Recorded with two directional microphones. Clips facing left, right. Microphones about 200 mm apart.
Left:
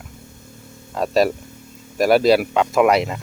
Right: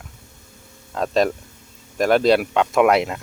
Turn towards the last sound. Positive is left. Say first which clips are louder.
# even
turn(degrees=0)  # may be behind; listen again after turning